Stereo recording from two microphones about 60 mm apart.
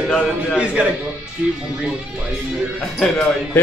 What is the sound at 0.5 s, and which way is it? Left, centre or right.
Speech, centre.